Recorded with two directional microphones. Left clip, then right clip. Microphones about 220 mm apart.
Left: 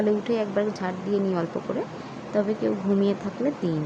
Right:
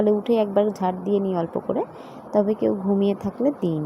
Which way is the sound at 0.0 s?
20° right (ahead or behind).